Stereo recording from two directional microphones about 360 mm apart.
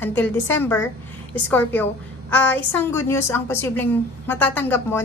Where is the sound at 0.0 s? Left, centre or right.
Centre.